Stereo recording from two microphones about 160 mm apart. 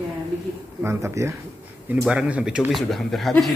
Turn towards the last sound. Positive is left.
turn(degrees=0)  # may be behind; listen again after turning